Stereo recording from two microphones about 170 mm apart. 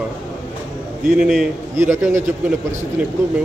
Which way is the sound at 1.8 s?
15° right (ahead or behind).